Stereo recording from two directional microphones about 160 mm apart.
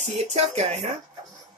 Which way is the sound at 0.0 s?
45° right (ahead or behind).